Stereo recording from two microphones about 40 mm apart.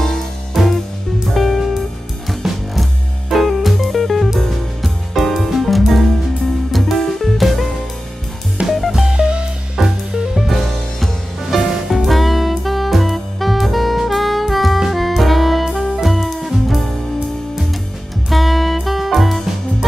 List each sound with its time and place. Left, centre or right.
1.3 s music: centre
8.6 s music: centre
9.1 s music: right
9.8 s music: centre
11.9 s saxophone: centre
14.9 s music: centre
18.3 s music: centre